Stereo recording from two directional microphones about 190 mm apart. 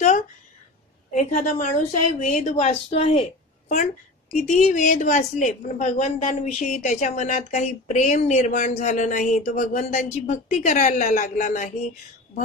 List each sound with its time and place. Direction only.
1.1 s a woman's voice: 40° left (ahead or behind)